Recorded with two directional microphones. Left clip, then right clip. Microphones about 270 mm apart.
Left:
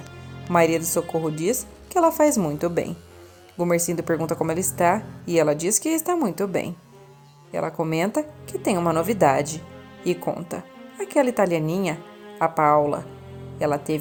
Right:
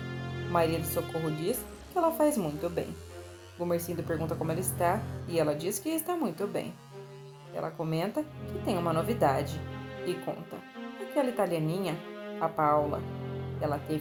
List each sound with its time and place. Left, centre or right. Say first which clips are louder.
0.5 s speech: left 9 dB; left